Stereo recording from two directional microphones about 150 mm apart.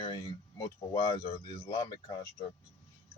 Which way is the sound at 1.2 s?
25° left (ahead or behind).